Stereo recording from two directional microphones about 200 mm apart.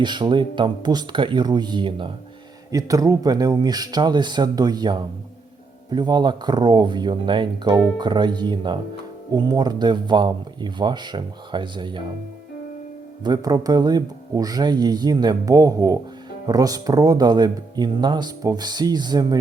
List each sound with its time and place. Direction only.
0.0 s speech: 20° right (ahead or behind)
13.2 s speech: 20° right (ahead or behind)